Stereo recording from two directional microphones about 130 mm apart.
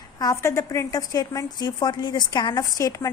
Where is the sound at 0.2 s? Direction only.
25° left (ahead or behind).